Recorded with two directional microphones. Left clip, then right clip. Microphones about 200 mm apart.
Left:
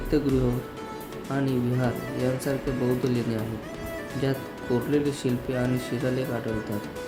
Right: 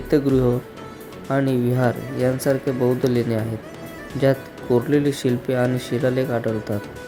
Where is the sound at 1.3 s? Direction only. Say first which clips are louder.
Right 7 dB; 35° right (ahead or behind).